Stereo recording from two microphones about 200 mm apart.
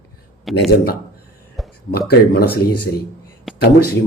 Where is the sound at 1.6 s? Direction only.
Centre (ahead or behind).